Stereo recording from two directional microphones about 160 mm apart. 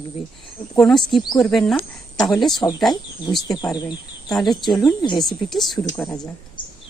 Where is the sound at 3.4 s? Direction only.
25° left (ahead or behind).